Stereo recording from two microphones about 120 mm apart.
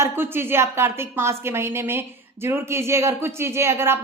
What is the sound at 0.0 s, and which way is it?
Speech, 20° right (ahead or behind).